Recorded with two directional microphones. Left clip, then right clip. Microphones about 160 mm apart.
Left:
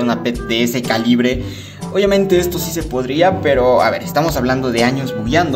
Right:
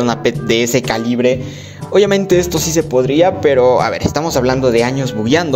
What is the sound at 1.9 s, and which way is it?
Speech, 55° right (ahead or behind).